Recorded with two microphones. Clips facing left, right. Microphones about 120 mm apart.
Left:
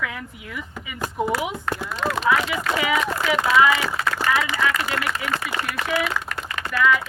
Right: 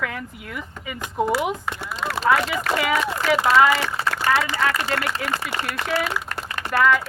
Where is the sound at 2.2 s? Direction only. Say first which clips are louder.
Right 3 dB; 40° right (ahead or behind).